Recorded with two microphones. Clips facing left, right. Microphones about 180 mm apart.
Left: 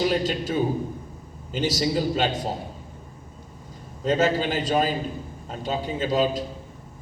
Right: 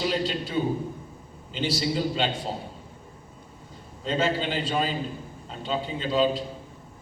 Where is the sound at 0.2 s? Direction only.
45° left (ahead or behind).